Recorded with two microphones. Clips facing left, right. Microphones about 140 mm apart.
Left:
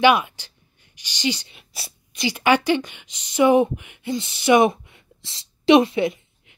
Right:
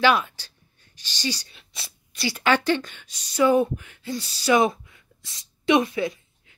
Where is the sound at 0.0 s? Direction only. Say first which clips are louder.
Left 4 dB; 15° left (ahead or behind).